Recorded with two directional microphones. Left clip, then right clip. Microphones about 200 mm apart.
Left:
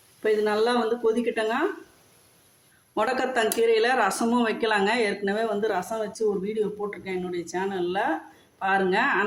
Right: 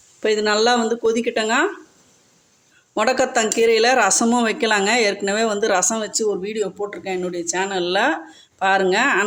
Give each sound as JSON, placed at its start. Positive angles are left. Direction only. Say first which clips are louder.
{"t": 0.2, "sound": "speech", "louder": "right 5 dB", "side_deg": -45}
{"t": 2.9, "sound": "speech", "louder": "right 6 dB", "side_deg": -40}